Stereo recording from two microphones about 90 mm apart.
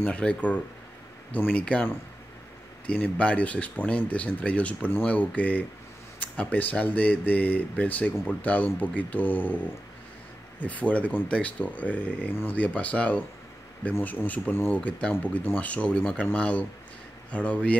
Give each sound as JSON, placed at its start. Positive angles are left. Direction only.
{"t": 0.0, "sound": "speech", "side_deg": 15}
{"t": 2.9, "sound": "speech", "side_deg": 15}